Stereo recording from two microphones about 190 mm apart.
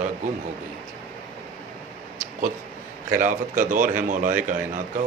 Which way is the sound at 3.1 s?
45° right (ahead or behind).